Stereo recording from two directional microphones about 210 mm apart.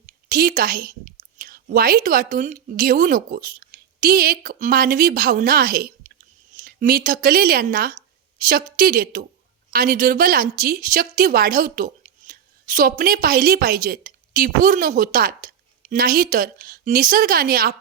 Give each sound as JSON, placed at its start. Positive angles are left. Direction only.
{"t": 0.0, "sound": "a woman's voice", "side_deg": -45}